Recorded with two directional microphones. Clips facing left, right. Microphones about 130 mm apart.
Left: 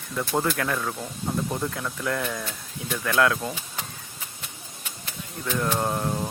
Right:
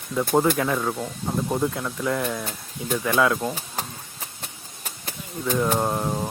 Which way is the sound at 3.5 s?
40° right (ahead or behind).